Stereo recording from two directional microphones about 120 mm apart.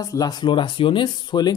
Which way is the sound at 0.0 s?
30° left (ahead or behind).